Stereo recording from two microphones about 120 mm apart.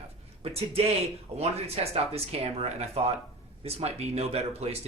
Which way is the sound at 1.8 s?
55° right (ahead or behind).